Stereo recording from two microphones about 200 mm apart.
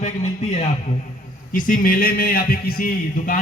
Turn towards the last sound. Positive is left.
turn(degrees=45)  # may be behind; listen again after turning